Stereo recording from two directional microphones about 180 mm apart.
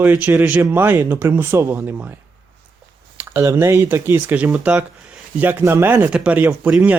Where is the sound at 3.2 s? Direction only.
15° right (ahead or behind).